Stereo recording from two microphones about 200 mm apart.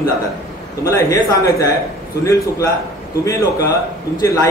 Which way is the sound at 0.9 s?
15° left (ahead or behind).